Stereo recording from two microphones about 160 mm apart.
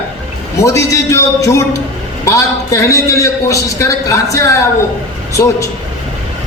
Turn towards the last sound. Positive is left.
turn(degrees=20)  # may be behind; listen again after turning